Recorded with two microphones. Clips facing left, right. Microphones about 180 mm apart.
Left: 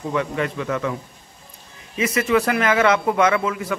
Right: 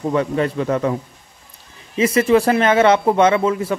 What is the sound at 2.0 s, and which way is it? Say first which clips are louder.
Speech: right 5 dB; 30° right (ahead or behind).